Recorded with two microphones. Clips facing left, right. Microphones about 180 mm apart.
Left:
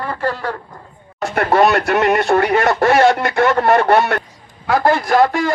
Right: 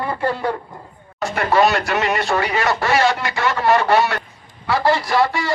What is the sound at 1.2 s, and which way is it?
A man's voice, 55° left (ahead or behind).